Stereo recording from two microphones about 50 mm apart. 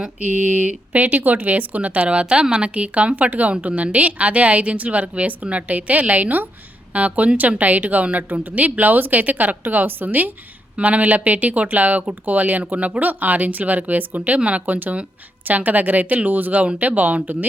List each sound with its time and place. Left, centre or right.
0.2 s a woman's voice: right